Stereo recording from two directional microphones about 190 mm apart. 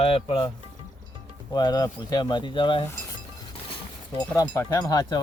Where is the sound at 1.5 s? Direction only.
20° left (ahead or behind).